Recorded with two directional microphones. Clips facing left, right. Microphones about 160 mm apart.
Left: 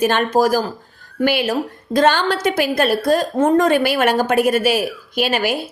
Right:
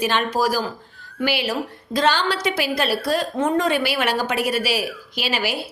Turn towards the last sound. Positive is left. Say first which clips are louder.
# left 6 dB
turn(degrees=50)  # may be behind; listen again after turning